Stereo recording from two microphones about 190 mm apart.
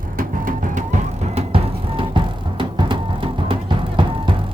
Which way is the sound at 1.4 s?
30° right (ahead or behind).